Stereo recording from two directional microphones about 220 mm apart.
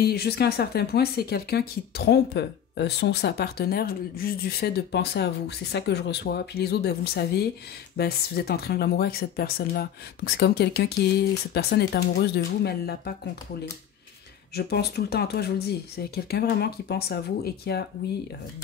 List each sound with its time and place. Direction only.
0.0 s speech: 45° left (ahead or behind)
14.5 s speech: 45° left (ahead or behind)